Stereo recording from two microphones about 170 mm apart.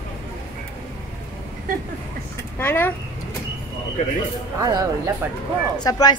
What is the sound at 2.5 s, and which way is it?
Speech, 10° left (ahead or behind).